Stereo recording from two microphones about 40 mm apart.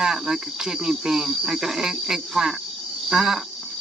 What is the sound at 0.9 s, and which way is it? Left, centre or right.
Speech, centre.